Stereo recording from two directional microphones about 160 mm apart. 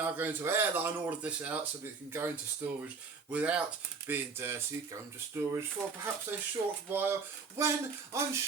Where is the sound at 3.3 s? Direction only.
10° right (ahead or behind).